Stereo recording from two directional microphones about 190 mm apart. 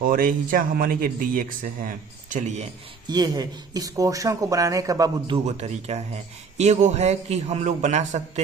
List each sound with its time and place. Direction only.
0.0 s speech: 45° right (ahead or behind)
3.1 s speech: 20° right (ahead or behind)
5.5 s a man's voice: 35° right (ahead or behind)